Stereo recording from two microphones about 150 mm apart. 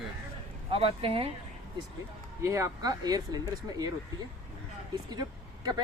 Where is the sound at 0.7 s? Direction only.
40° right (ahead or behind).